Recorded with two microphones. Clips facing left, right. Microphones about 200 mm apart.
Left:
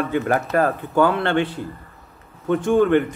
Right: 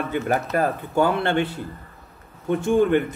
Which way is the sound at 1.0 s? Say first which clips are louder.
Left 2 dB; 10° right (ahead or behind).